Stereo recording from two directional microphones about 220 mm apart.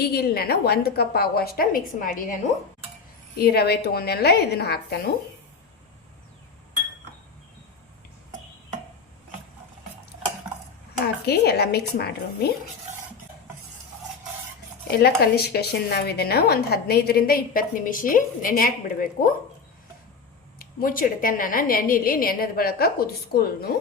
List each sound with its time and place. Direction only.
0.0 s a woman's voice: 45° left (ahead or behind)
3.3 s a woman's voice: 45° left (ahead or behind)
11.0 s a woman's voice: 45° left (ahead or behind)
14.8 s a woman's voice: 45° left (ahead or behind)
20.6 s a woman's voice: 40° left (ahead or behind)